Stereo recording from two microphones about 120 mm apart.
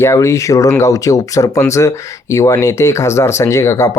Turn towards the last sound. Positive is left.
turn(degrees=25)  # may be behind; listen again after turning